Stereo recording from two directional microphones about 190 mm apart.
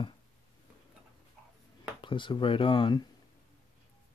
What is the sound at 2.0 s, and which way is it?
Speech, 25° left (ahead or behind).